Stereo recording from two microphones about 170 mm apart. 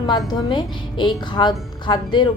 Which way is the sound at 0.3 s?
25° left (ahead or behind).